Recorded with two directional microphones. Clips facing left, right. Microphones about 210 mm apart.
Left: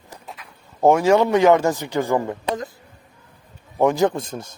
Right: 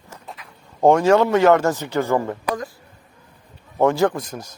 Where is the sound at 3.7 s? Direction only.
15° left (ahead or behind).